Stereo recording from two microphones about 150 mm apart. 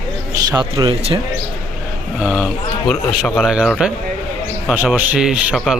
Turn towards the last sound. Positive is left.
turn(degrees=0)  # may be behind; listen again after turning